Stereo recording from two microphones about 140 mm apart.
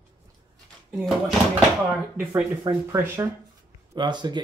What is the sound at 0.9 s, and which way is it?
Speech, centre (ahead or behind).